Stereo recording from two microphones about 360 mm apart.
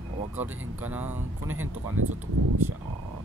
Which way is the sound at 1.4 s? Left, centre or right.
Right.